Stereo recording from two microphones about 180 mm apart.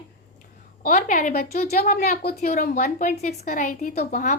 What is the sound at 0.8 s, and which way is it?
A woman's voice, 45° left (ahead or behind).